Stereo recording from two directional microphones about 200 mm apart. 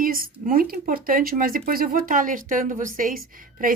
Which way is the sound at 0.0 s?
45° right (ahead or behind).